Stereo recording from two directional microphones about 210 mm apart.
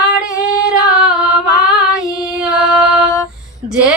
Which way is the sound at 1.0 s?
Centre (ahead or behind).